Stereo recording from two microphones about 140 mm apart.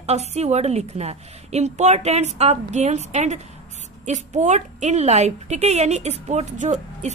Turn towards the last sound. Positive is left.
turn(degrees=-55)  # may be behind; listen again after turning